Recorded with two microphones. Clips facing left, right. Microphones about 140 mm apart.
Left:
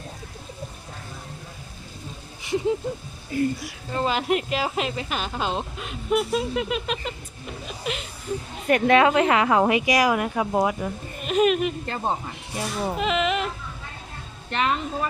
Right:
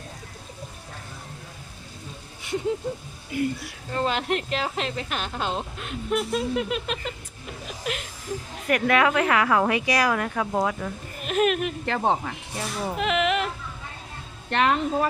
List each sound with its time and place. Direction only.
2.4 s a sound: centre (ahead or behind)
3.9 s speech: 5° left (ahead or behind)
7.9 s a sound: centre (ahead or behind)
8.6 s a woman's voice: 30° left (ahead or behind)
11.2 s speech: centre (ahead or behind)
11.9 s speech: 70° right (ahead or behind)
12.5 s speech: 15° left (ahead or behind)
13.0 s speech: centre (ahead or behind)
14.5 s speech: 55° right (ahead or behind)